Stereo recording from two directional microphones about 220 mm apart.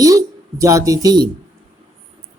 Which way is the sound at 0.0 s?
15° right (ahead or behind).